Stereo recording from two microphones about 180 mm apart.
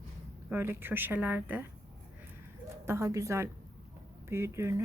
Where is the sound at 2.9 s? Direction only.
15° right (ahead or behind).